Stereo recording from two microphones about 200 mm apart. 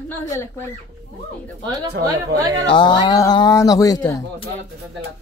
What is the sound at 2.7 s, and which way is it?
Speech, 20° left (ahead or behind).